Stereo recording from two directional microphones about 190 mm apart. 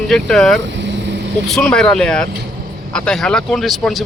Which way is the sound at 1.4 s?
Centre (ahead or behind).